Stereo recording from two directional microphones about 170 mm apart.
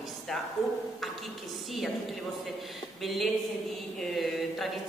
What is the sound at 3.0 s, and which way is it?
A woman's voice, centre (ahead or behind).